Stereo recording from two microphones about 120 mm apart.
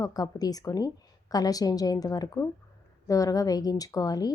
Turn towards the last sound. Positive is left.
turn(degrees=30)  # may be behind; listen again after turning